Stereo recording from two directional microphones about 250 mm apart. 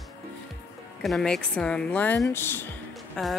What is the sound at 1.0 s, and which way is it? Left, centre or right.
A woman's voice, centre.